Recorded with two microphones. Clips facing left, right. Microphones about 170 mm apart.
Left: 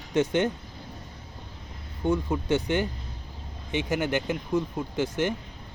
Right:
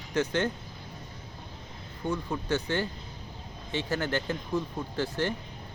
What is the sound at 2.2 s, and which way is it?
Speech, 15° left (ahead or behind).